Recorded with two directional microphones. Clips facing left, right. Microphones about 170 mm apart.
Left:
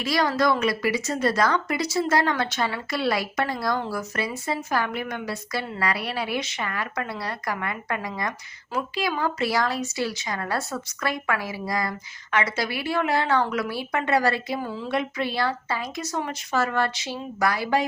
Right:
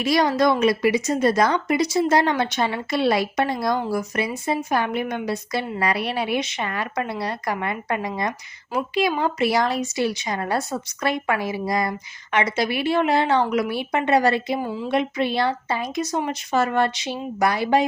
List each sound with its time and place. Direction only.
0.0 s a woman's voice: 20° right (ahead or behind)